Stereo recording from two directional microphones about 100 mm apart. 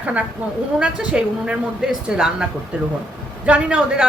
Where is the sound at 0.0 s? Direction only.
15° right (ahead or behind).